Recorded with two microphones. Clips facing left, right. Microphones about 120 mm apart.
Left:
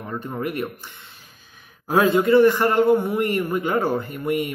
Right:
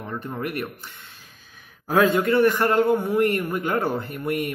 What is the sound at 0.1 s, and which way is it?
Speech, 15° left (ahead or behind).